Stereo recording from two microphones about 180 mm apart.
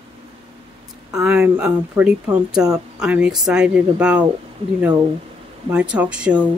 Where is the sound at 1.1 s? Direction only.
5° right (ahead or behind).